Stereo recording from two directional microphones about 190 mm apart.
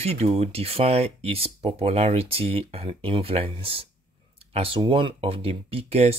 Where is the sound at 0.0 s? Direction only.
35° right (ahead or behind).